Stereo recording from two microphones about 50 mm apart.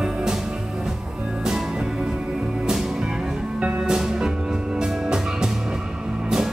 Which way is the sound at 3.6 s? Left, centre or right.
Centre.